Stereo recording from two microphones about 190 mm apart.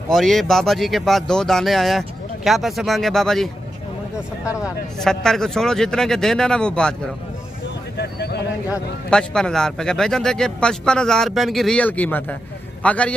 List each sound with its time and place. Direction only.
0.1 s speech: centre (ahead or behind)
5.0 s speech: centre (ahead or behind)
8.0 s a sound: 60° left (ahead or behind)
9.1 s a man's voice: 5° left (ahead or behind)